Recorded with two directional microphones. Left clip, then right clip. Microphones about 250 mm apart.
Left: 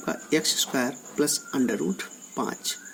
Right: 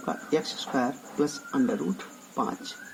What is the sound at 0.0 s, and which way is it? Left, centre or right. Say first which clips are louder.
Speech: left 2 dB; left.